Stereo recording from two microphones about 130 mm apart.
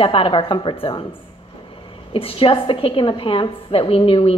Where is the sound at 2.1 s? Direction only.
45° left (ahead or behind).